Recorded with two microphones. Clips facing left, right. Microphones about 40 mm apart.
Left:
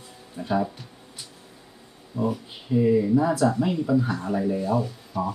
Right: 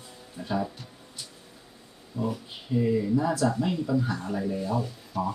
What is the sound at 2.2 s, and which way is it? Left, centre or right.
Speech, centre.